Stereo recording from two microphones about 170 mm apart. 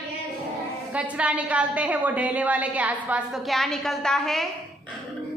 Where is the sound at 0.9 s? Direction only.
5° right (ahead or behind).